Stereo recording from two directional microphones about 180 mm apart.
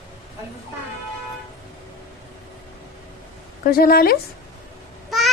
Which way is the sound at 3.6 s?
55° left (ahead or behind).